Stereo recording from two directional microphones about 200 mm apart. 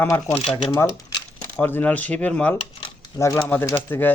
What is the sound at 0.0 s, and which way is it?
Speech, 10° left (ahead or behind).